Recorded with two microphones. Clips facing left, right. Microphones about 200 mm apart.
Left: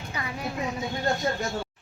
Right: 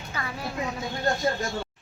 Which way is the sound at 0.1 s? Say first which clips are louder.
Even; 20° left (ahead or behind).